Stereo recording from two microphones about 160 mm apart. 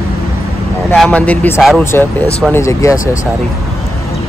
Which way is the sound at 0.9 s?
10° left (ahead or behind).